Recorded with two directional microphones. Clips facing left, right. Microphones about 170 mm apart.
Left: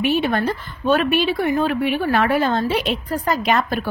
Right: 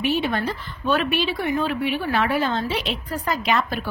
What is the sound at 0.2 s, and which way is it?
A woman's voice, 50° left (ahead or behind).